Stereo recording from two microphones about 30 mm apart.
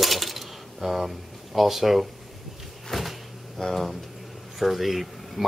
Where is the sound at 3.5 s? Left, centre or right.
Centre.